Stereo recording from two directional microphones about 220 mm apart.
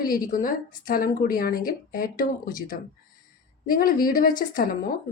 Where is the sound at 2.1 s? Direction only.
15° left (ahead or behind).